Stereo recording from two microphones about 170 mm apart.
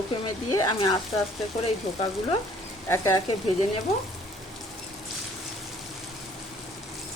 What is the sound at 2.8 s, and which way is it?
Speech, 15° left (ahead or behind).